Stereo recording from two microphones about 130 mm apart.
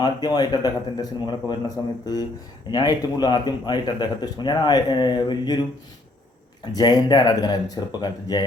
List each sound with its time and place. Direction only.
0.0 s speech: 30° left (ahead or behind)
6.7 s speech: 35° left (ahead or behind)